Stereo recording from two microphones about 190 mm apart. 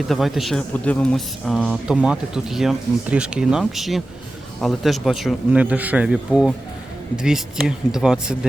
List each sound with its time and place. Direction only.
0.1 s speech: centre (ahead or behind)